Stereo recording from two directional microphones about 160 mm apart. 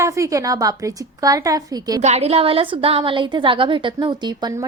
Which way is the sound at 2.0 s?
40° right (ahead or behind).